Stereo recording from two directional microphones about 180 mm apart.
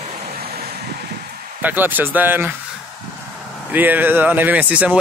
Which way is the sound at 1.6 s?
10° right (ahead or behind).